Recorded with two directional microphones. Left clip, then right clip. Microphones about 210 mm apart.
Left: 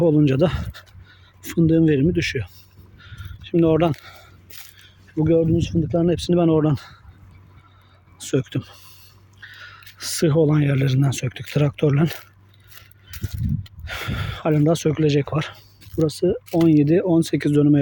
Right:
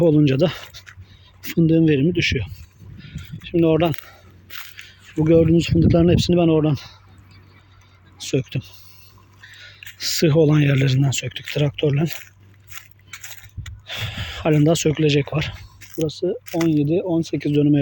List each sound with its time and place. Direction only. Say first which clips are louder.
0.0 s speech: right 1 dB; centre (ahead or behind)
3.0 s walk: right 3 dB; centre (ahead or behind)
5.1 s speech: right 3 dB; 5° right (ahead or behind)
5.4 s speech: right 4 dB; 20° right (ahead or behind); by 6.9 s 5° left (ahead or behind)
8.2 s speech: even; 5° left (ahead or behind)
13.7 s speech: right 3 dB; 5° left (ahead or behind)
16.0 s speech: left 2 dB; 20° left (ahead or behind)